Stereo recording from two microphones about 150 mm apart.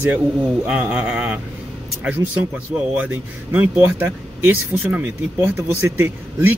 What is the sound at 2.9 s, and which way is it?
Speech, 10° right (ahead or behind).